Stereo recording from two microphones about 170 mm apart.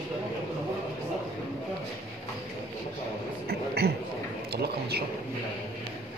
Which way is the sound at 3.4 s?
70° right (ahead or behind).